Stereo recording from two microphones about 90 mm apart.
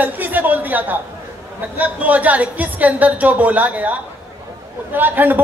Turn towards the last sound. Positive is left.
turn(degrees=-20)  # may be behind; listen again after turning